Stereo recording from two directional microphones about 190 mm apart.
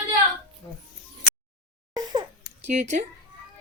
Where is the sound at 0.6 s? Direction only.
20° left (ahead or behind).